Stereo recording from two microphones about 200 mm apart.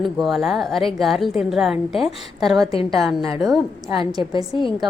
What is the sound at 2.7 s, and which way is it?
Speech, 30° left (ahead or behind).